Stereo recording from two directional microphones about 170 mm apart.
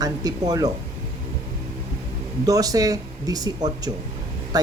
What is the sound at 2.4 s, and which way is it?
Speech, 20° right (ahead or behind).